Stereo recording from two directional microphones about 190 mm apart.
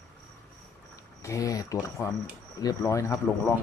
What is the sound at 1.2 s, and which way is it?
Speech, 15° left (ahead or behind).